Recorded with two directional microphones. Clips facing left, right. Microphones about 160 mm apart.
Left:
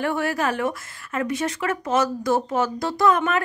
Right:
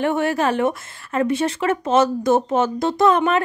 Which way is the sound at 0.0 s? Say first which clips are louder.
Right 4 dB; 25° right (ahead or behind).